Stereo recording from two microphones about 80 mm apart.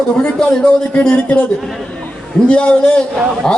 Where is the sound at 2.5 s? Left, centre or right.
Centre.